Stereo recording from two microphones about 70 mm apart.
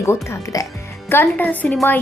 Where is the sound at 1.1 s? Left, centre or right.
Left.